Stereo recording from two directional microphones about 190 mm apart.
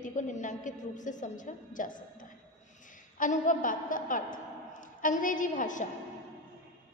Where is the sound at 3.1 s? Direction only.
40° left (ahead or behind).